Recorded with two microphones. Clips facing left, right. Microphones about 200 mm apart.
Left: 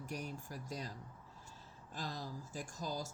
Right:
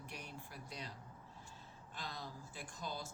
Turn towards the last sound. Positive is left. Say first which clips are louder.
# left 4 dB
turn(degrees=40)  # may be behind; listen again after turning